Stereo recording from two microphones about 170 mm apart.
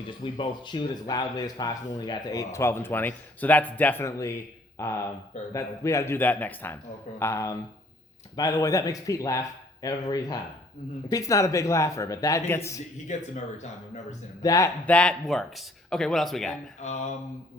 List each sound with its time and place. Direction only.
0.3 s a man's voice: 25° left (ahead or behind)
13.1 s speech: 45° left (ahead or behind)
14.4 s speech: 20° left (ahead or behind)
14.8 s speech: 5° left (ahead or behind)
16.8 s speech: 40° left (ahead or behind)